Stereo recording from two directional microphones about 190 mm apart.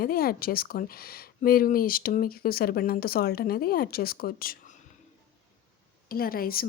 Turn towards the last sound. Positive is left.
turn(degrees=50)  # may be behind; listen again after turning